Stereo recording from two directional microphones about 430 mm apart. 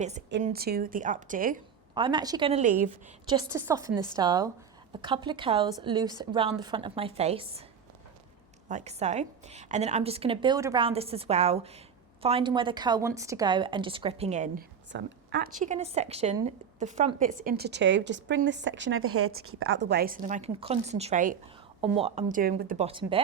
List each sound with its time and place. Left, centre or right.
0.0 s a woman's voice: centre
8.7 s a woman's voice: centre